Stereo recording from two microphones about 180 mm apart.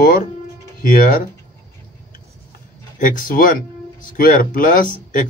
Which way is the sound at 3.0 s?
50° left (ahead or behind).